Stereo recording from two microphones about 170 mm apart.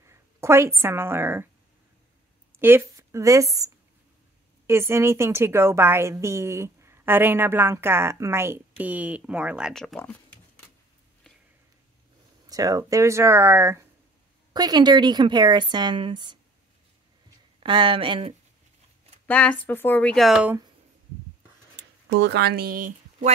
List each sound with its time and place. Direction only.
0.0 s a woman's voice: 15° right (ahead or behind)
2.6 s a woman's voice: 15° right (ahead or behind); by 10.1 s 5° left (ahead or behind)
12.4 s a woman's voice: 20° right (ahead or behind)
17.6 s a woman's voice: 30° right (ahead or behind)
19.2 s speech: 10° left (ahead or behind)
22.1 s speech: 85° right; by 23.3 s 50° right (ahead or behind)